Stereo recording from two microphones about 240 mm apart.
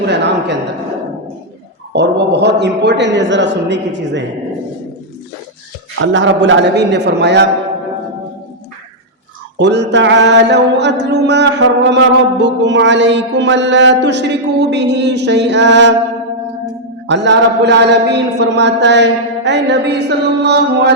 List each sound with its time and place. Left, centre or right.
0.1 s a woman's voice: right
1.9 s mantra: right
6.0 s mantra: right
9.6 s mantra: right
17.1 s mantra: right